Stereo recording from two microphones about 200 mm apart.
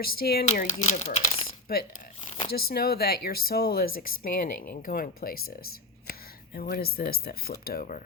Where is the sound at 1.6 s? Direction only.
50° left (ahead or behind).